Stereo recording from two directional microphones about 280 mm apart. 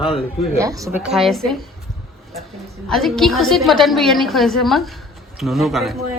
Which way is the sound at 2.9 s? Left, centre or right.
Centre.